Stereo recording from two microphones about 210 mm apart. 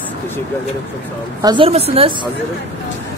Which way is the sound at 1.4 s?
20° right (ahead or behind).